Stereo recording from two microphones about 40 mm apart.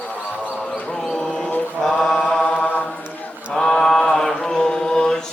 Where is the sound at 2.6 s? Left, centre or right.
Left.